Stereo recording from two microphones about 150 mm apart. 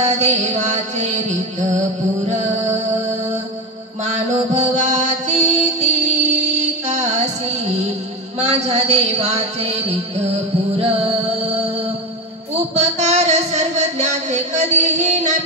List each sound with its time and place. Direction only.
0.0 s music: 50° right (ahead or behind)
4.0 s music: 50° right (ahead or behind)
12.5 s a sound: 50° right (ahead or behind)